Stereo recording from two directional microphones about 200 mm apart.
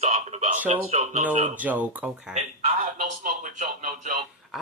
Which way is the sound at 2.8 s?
40° right (ahead or behind).